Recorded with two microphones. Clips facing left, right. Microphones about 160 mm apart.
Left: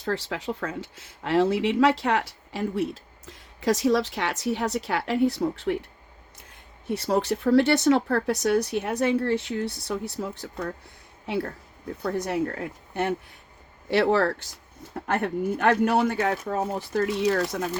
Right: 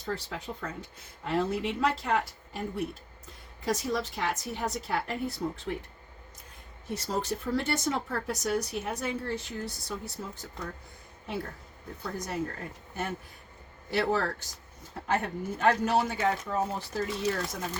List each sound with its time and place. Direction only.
0.0 s speech: 90° left
6.9 s speech: 65° left (ahead or behind)
12.0 s speech: 65° left (ahead or behind)